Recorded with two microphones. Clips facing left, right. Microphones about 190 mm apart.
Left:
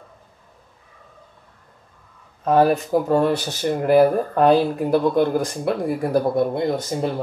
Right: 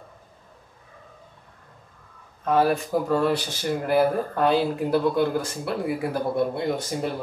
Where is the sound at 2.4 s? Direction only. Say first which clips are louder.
Left 4 dB; 45° left (ahead or behind).